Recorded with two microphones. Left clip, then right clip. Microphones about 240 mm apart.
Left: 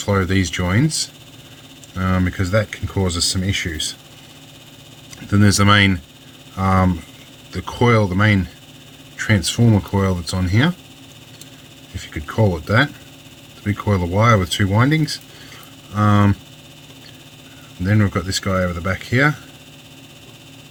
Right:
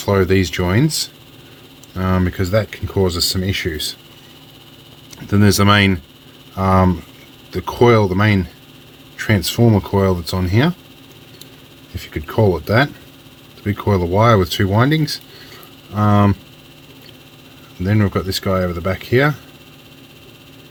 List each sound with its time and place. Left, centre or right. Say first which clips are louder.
0.0 s speech: right 4 dB; right
2.0 s speech: right 2 dB; right
5.1 s speech: right 2 dB; centre
11.9 s speech: right 3 dB; centre
17.8 s speech: right 2 dB; centre